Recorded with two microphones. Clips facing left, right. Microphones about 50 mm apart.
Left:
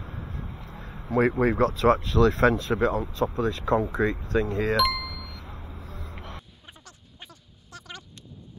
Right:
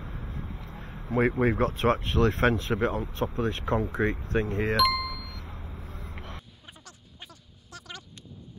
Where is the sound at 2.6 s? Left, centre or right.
Left.